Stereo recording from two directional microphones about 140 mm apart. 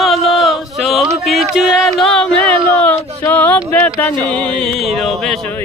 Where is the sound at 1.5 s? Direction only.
5° right (ahead or behind).